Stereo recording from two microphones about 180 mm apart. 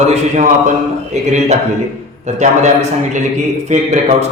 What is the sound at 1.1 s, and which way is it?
Speech, 40° right (ahead or behind).